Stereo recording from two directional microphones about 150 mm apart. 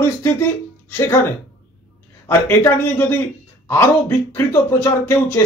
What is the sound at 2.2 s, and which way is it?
Speech, 15° left (ahead or behind).